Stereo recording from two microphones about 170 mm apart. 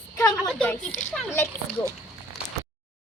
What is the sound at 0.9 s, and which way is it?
Speech, 45° left (ahead or behind).